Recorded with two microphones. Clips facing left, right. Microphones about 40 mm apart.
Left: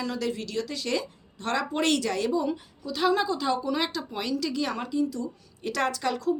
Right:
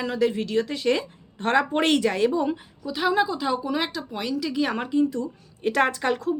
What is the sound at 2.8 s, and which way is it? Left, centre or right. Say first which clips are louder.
A woman's voice: right 2 dB; centre.